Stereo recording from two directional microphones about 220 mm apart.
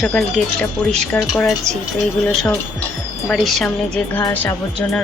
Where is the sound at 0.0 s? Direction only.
Centre (ahead or behind).